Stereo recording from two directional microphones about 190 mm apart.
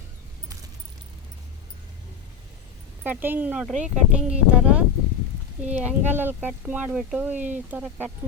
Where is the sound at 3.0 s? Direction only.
10° right (ahead or behind).